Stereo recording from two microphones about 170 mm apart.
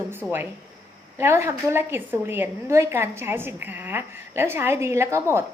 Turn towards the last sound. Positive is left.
turn(degrees=-15)  # may be behind; listen again after turning